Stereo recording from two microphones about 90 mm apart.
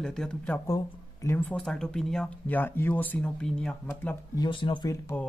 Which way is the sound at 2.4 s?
20° left (ahead or behind).